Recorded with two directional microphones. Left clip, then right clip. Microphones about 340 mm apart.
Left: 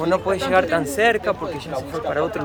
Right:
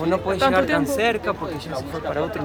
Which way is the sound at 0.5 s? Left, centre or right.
Centre.